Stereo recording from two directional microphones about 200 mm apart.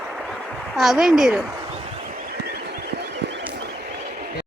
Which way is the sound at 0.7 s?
Centre (ahead or behind).